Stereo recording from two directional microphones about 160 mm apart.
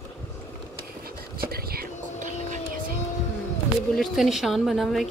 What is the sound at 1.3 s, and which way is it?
Whispering, 70° right (ahead or behind).